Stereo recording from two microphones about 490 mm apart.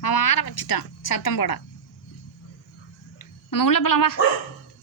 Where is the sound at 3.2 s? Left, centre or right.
Left.